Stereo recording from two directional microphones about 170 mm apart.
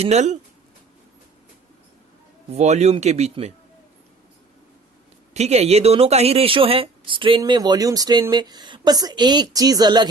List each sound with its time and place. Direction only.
0.0 s speech: 40° right (ahead or behind)
2.5 s speech: 40° right (ahead or behind)
5.3 s speech: 40° right (ahead or behind)